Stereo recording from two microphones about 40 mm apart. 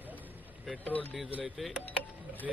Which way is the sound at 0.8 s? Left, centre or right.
Left.